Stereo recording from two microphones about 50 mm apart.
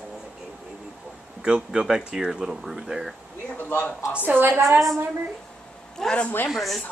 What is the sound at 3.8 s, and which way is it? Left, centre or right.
Speech, left.